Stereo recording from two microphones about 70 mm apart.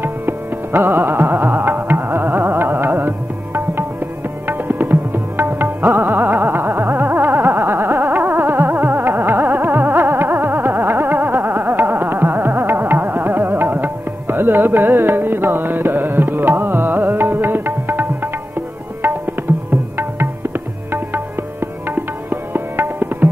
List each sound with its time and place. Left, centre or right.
0.0 s music: right
19.7 s music: right